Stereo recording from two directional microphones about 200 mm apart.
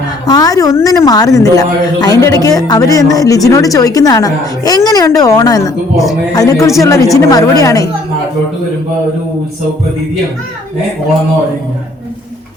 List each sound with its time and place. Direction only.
0.3 s speech: 20° left (ahead or behind)